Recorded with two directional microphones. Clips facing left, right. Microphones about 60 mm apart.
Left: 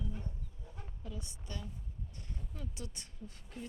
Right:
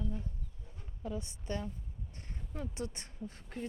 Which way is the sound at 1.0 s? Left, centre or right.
Right.